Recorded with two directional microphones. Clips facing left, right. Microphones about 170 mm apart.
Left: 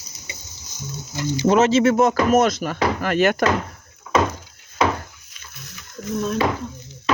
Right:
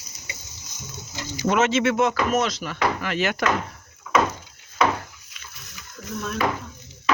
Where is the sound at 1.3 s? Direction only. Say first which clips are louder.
Left 5 dB; 35° left (ahead or behind); by 3.4 s 50° left (ahead or behind).